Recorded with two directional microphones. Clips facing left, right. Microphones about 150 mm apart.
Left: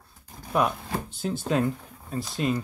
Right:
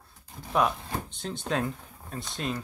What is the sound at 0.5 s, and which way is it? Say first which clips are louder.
Speech: left 1 dB; 5° left (ahead or behind).